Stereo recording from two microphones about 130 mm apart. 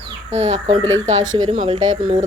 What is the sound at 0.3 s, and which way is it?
Speech, 55° right (ahead or behind).